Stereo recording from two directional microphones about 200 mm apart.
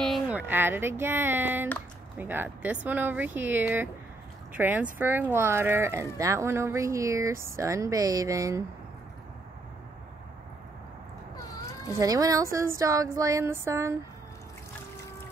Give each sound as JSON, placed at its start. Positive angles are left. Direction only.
{"t": 0.0, "sound": "a woman's voice", "side_deg": -5}
{"t": 11.3, "sound": "a sound", "side_deg": 20}
{"t": 12.0, "sound": "a woman's voice", "side_deg": -15}